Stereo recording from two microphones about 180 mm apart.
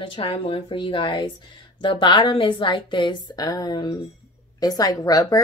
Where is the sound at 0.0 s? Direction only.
30° left (ahead or behind).